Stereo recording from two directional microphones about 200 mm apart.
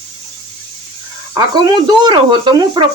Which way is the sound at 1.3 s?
20° right (ahead or behind).